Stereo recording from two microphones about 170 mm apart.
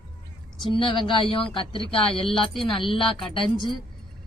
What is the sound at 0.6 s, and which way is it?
A woman's voice, 30° left (ahead or behind).